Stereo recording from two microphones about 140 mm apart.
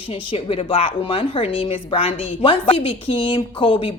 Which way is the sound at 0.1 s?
40° left (ahead or behind).